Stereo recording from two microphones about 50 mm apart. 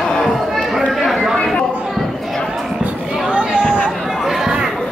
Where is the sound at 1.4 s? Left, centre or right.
Centre.